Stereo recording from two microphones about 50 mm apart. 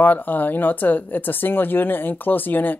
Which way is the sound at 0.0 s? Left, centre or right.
Left.